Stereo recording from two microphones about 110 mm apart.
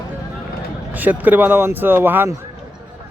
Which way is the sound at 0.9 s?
15° right (ahead or behind).